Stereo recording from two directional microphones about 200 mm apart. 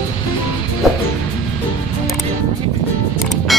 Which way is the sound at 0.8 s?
Centre (ahead or behind).